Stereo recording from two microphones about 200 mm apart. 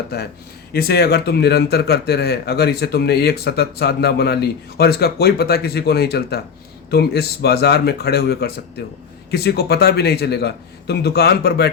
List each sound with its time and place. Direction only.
0.1 s speech: 50° left (ahead or behind)